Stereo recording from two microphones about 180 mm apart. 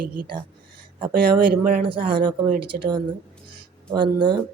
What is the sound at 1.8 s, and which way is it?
Speech, 30° right (ahead or behind).